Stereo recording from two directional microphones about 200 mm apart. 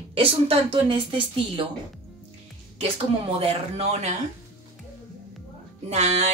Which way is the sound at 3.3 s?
30° right (ahead or behind).